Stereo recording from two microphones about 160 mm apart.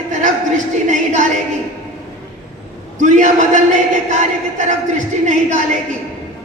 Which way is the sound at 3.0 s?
50° right (ahead or behind).